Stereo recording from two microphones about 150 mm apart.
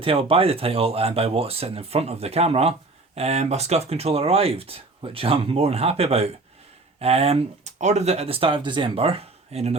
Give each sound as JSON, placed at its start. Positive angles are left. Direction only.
{"t": 0.0, "sound": "speech", "side_deg": -40}